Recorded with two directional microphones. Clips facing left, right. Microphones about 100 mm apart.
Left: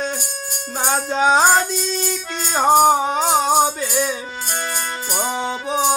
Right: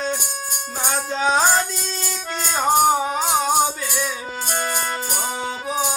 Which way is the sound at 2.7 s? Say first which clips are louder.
Left 3 dB; 30° left (ahead or behind).